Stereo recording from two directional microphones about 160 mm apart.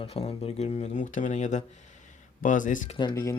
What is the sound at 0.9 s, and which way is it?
Speech, 55° left (ahead or behind).